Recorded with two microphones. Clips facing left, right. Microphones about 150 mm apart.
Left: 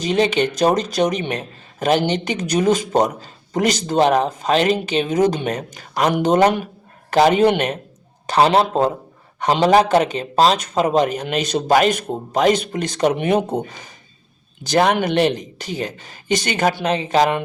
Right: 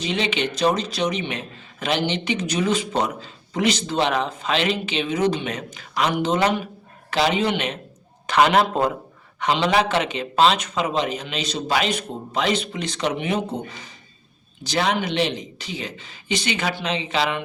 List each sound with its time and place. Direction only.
0.0 s a man's voice: 45° left (ahead or behind)
8.3 s a man's voice: 35° left (ahead or behind); by 13.6 s 50° left (ahead or behind)
14.7 s a man's voice: 50° left (ahead or behind)